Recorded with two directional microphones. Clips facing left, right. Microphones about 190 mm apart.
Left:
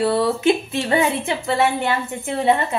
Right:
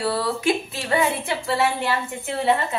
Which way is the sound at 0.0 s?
25° left (ahead or behind).